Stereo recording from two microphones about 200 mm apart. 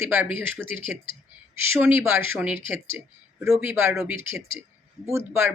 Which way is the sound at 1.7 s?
10° right (ahead or behind).